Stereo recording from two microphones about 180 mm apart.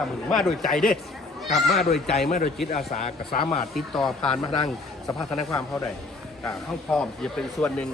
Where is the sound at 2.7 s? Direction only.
40° left (ahead or behind).